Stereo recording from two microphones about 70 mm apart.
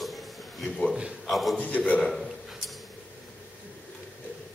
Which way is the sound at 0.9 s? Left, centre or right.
Centre.